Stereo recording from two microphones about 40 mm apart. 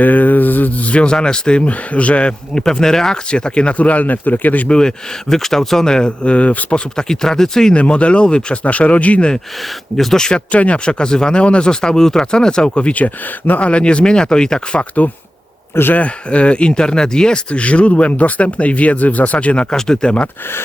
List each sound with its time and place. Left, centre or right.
0.0 s a sound: left
0.9 s speech: left
2.6 s speech: centre
3.3 s speech: left
4.7 s speech: centre; by 6.7 s left
6.9 s speech: centre
7.8 s speech: left
8.6 s speech: left
10.0 s speech: centre
10.5 s speech: left
16.0 s speech: left
19.7 s speech: centre